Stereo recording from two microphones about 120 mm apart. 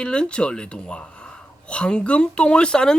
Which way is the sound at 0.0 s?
10° left (ahead or behind).